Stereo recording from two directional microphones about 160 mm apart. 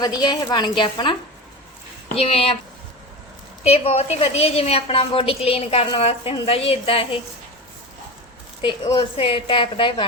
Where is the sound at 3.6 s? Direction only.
40° left (ahead or behind).